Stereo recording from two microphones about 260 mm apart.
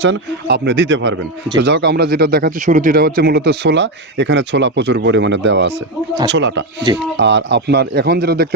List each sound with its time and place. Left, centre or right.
0.0 s a man's voice: right